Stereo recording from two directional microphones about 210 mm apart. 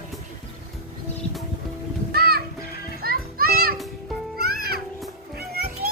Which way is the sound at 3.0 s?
45° right (ahead or behind).